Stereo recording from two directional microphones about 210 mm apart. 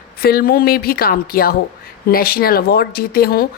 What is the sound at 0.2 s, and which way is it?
A woman's voice, 45° left (ahead or behind).